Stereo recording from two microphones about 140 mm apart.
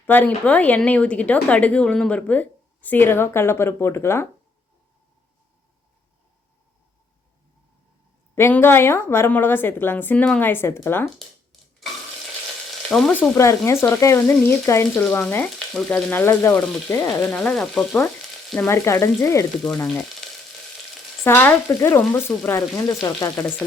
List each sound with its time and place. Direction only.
0.0 s speech: 10° left (ahead or behind)
8.4 s speech: 15° left (ahead or behind)
12.9 s frying: centre (ahead or behind)
13.1 s frying: 20° left (ahead or behind)
15.0 s speech: 15° left (ahead or behind)
15.5 s speech: 5° left (ahead or behind); by 17.2 s 25° left (ahead or behind)
17.2 s speech: 10° left (ahead or behind)
18.9 s frying: 20° left (ahead or behind)
19.8 s speech: 10° left (ahead or behind)
21.2 s speech: 15° left (ahead or behind)
22.9 s frying: 25° left (ahead or behind)